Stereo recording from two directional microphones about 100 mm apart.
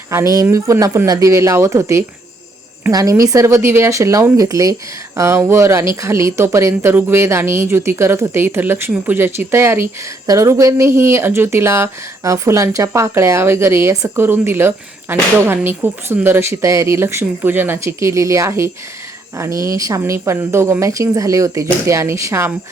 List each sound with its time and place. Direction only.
0.1 s speech: 30° right (ahead or behind)